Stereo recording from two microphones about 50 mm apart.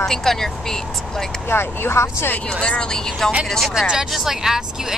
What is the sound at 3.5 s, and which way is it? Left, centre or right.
Speech, centre.